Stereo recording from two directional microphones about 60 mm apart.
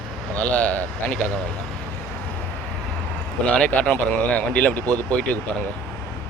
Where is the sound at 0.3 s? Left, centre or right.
Left.